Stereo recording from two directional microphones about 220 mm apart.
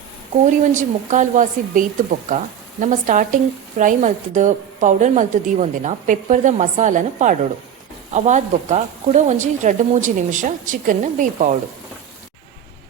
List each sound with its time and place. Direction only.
0.4 s speech: 35° right (ahead or behind)